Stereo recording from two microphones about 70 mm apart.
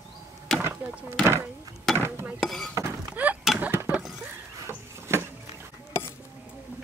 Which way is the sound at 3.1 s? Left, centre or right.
Right.